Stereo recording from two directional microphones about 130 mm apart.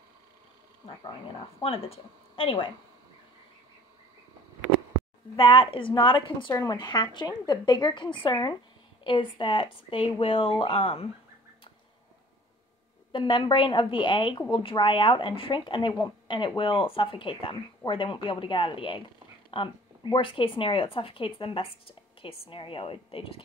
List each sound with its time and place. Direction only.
1.6 s speech: 50° left (ahead or behind)
5.3 s speech: 45° left (ahead or behind)
13.1 s speech: 40° left (ahead or behind)